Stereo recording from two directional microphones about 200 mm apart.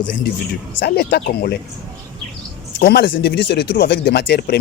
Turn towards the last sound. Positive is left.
turn(degrees=55)  # may be behind; listen again after turning